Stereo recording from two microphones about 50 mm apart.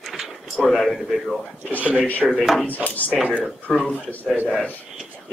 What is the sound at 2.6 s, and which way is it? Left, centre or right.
Speech, left.